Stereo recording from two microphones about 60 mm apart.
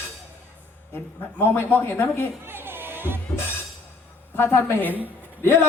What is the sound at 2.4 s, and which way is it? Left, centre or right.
Music, right.